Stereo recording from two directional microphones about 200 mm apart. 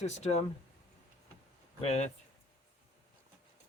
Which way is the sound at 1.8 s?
35° left (ahead or behind).